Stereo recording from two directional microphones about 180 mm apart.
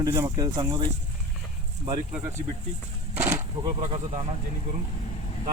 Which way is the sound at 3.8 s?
40° right (ahead or behind).